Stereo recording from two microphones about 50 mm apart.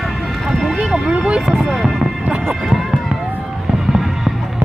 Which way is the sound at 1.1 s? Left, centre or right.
Right.